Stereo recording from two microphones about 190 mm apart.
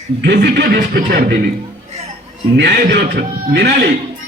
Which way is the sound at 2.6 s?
60° right (ahead or behind).